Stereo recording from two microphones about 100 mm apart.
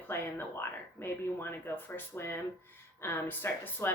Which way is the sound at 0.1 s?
25° left (ahead or behind).